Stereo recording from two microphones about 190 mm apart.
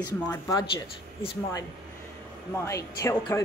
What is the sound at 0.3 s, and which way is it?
A woman's voice, 20° left (ahead or behind).